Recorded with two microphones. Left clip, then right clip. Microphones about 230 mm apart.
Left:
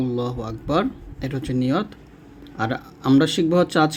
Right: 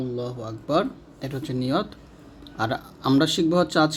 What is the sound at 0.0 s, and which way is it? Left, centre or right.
Speech, left.